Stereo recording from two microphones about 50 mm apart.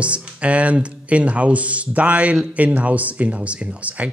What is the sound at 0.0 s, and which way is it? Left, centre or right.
Speech, right.